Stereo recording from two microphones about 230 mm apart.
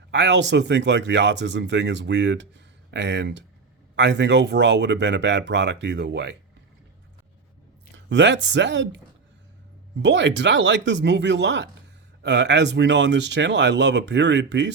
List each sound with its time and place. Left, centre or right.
0.1 s speech: right
7.9 s speech: right
10.0 s speech: right